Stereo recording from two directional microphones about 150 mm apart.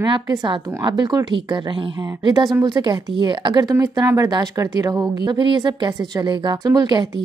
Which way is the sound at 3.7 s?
20° right (ahead or behind).